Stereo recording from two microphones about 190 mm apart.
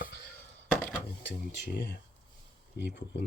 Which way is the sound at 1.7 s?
65° left (ahead or behind).